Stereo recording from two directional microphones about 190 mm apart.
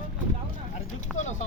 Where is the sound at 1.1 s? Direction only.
5° left (ahead or behind).